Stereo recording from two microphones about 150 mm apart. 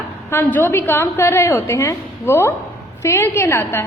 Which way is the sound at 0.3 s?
15° left (ahead or behind).